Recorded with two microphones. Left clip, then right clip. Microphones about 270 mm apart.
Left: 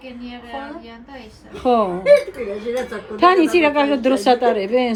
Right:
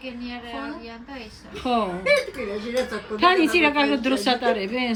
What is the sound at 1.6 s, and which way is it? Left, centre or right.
Speech, left.